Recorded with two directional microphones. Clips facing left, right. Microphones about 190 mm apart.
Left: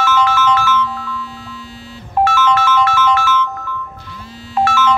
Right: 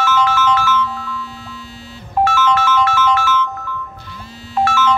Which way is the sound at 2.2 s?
60° left (ahead or behind).